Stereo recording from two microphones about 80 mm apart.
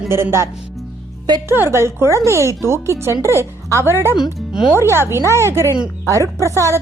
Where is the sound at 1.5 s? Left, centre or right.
Right.